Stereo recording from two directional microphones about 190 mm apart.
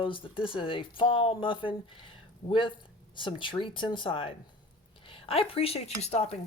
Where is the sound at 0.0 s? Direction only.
25° left (ahead or behind).